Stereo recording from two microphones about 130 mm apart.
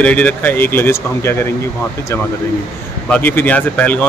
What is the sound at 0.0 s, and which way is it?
Speech, 10° left (ahead or behind).